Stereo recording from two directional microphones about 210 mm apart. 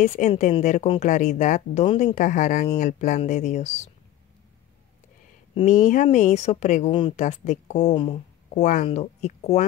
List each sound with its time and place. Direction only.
0.0 s a woman's voice: 35° left (ahead or behind)
5.5 s a woman's voice: 30° left (ahead or behind)